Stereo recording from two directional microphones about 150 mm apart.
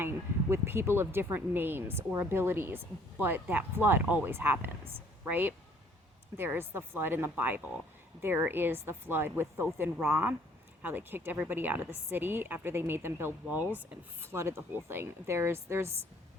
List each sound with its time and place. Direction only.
0.0 s speech: 15° right (ahead or behind)